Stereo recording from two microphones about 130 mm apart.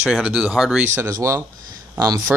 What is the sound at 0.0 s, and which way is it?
Speech, 5° right (ahead or behind).